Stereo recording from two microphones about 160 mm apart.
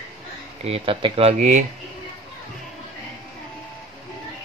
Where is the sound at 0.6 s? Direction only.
35° right (ahead or behind).